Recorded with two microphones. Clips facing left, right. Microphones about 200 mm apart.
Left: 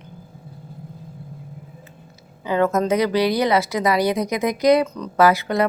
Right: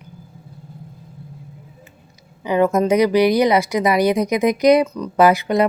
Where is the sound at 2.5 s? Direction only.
15° right (ahead or behind).